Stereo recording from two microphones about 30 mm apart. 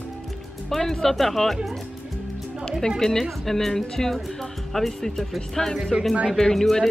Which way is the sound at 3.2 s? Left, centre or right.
Centre.